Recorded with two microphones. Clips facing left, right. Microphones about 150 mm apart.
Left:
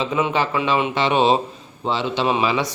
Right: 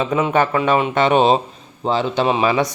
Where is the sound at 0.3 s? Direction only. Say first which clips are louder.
Right 6 dB; 50° right (ahead or behind).